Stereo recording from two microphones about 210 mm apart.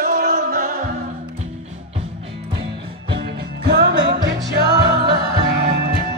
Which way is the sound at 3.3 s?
50° right (ahead or behind).